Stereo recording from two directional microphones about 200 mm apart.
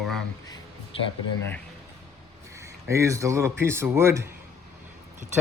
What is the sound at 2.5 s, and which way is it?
Speech, 15° right (ahead or behind).